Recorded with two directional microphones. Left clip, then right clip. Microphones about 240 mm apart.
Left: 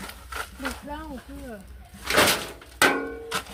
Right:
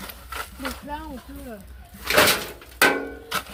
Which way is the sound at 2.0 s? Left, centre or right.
Centre.